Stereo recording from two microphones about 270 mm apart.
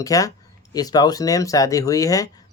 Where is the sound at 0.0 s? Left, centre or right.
Centre.